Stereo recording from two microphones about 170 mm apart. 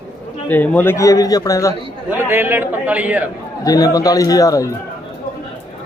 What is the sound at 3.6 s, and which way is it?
A man's voice, 20° left (ahead or behind).